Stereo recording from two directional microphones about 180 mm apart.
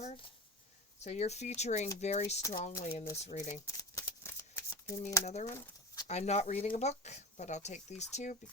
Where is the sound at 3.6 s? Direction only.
15° left (ahead or behind).